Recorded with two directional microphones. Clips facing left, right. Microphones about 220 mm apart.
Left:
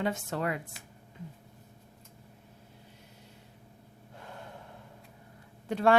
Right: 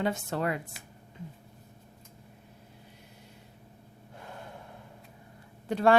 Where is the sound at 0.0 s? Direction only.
35° right (ahead or behind).